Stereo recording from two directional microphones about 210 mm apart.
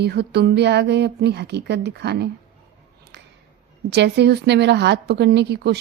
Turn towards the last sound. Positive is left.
turn(degrees=-50)  # may be behind; listen again after turning